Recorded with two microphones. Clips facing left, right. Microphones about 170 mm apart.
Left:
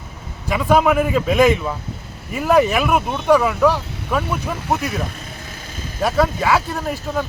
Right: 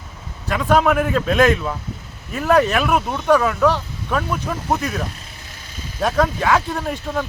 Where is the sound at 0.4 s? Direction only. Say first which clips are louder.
Left 1 dB; 10° left (ahead or behind).